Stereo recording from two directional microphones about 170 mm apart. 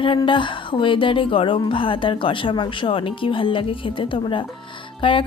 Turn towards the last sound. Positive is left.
turn(degrees=30)  # may be behind; listen again after turning